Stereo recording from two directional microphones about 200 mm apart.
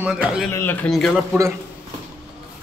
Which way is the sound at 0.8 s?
Centre (ahead or behind).